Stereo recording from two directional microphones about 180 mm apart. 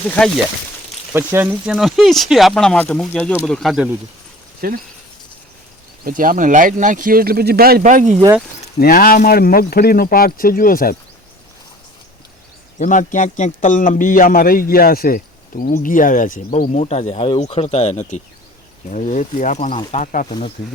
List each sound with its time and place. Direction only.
1.1 s speech: 10° right (ahead or behind)
4.6 s speech: 55° right (ahead or behind)
6.1 s speech: 50° right (ahead or behind)
8.8 s a man's voice: 55° left (ahead or behind)
12.8 s a man's voice: 45° left (ahead or behind)